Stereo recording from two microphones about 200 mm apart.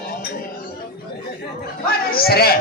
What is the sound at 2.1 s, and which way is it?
Speech, 50° left (ahead or behind).